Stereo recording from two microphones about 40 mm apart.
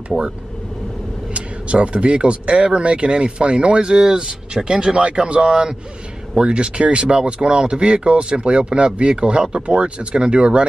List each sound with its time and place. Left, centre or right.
1.3 s speech: right